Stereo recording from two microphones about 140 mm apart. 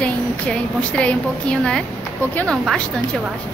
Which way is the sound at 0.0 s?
10° left (ahead or behind).